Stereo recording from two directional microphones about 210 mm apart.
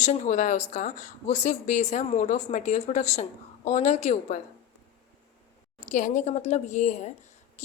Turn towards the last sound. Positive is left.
turn(degrees=35)  # may be behind; listen again after turning